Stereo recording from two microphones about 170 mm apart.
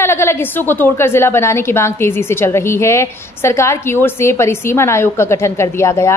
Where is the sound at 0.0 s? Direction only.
15° left (ahead or behind).